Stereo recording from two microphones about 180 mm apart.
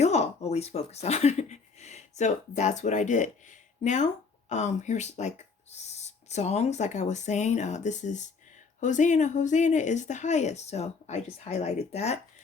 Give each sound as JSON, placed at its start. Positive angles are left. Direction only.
{"t": 0.0, "sound": "speech", "side_deg": 40}